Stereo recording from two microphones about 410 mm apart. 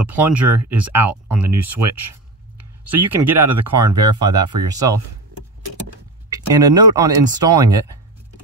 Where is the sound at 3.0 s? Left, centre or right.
Right.